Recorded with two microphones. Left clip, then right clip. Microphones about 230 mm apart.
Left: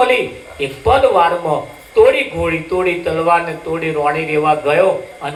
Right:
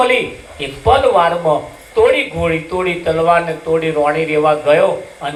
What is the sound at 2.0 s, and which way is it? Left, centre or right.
Speech, left.